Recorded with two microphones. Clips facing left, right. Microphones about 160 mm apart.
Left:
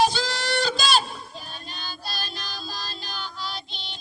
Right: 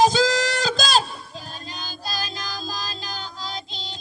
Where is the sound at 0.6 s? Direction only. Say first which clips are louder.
Right 2 dB; 90° right.